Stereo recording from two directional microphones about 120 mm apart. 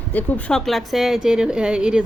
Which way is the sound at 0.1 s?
15° left (ahead or behind).